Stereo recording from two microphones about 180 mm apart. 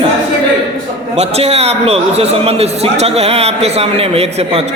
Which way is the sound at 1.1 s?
35° right (ahead or behind).